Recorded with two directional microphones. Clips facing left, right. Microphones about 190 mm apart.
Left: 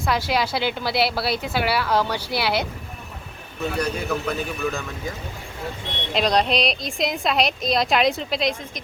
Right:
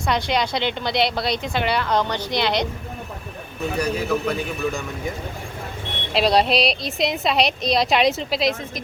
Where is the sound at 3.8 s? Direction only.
10° right (ahead or behind).